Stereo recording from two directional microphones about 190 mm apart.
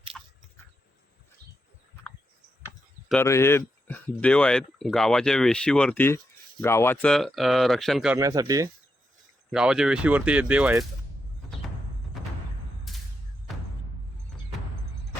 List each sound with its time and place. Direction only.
0.1 s biting: centre (ahead or behind)
3.1 s speech: 10° left (ahead or behind)
8.2 s speech: 20° right (ahead or behind)
9.5 s speech: 5° right (ahead or behind)
12.9 s a sound: centre (ahead or behind)